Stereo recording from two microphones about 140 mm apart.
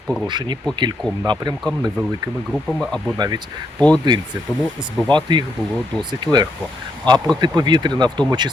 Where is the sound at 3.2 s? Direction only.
30° right (ahead or behind).